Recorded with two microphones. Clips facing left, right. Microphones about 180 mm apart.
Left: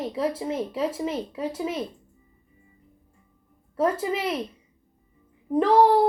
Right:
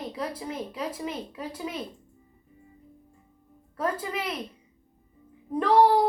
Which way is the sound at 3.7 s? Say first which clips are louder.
Left 6 dB; 25° left (ahead or behind).